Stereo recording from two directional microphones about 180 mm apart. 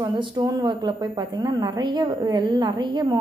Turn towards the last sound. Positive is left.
turn(degrees=-25)  # may be behind; listen again after turning